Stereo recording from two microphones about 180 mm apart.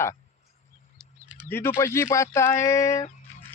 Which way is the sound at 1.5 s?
15° left (ahead or behind).